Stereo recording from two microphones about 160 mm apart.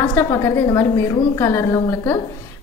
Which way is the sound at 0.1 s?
20° left (ahead or behind).